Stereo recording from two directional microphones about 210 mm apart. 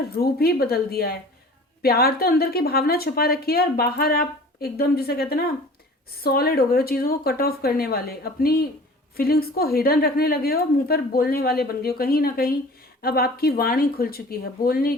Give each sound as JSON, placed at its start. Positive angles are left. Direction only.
{"t": 0.2, "sound": "a woman's voice", "side_deg": 45}